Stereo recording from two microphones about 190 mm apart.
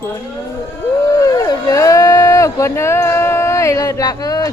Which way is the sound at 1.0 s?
20° left (ahead or behind).